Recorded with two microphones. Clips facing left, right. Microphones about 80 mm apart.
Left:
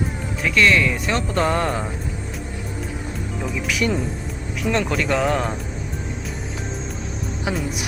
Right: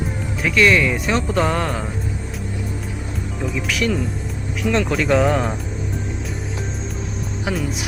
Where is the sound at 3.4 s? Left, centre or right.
Centre.